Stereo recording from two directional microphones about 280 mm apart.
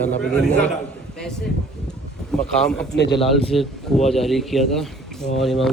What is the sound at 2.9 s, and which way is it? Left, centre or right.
Speech, left.